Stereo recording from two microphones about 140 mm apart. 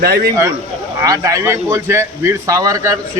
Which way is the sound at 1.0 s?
25° right (ahead or behind).